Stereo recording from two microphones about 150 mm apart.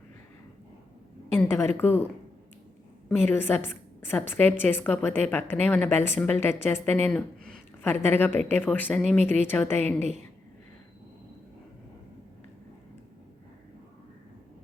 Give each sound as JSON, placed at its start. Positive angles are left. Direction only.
{"t": 1.3, "sound": "a woman's voice", "side_deg": 15}
{"t": 3.1, "sound": "a woman's voice", "side_deg": 15}